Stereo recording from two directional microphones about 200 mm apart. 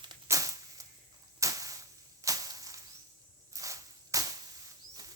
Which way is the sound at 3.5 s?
15° right (ahead or behind).